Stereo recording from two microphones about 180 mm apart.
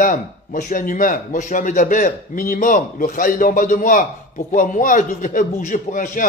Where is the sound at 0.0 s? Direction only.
45° left (ahead or behind).